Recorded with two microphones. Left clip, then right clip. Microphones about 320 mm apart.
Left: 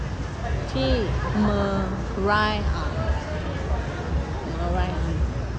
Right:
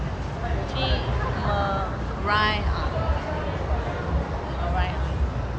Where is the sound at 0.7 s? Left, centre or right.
Centre.